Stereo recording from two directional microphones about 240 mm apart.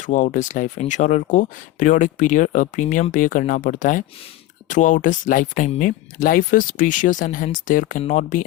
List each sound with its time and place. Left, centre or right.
0.0 s speech: left